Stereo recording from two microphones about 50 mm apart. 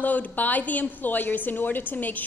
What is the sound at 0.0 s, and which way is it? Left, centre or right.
A woman's voice, left.